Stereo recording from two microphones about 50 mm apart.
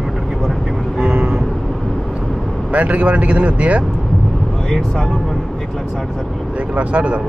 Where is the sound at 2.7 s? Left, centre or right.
Right.